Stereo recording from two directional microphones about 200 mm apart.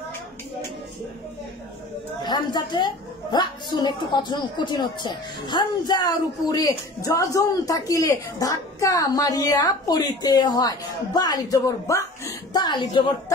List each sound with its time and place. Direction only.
2.2 s a woman's voice: 20° left (ahead or behind)